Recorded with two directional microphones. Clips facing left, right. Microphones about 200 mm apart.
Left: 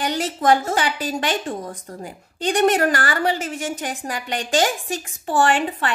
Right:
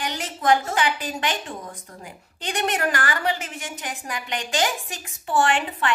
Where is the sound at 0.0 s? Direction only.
40° left (ahead or behind).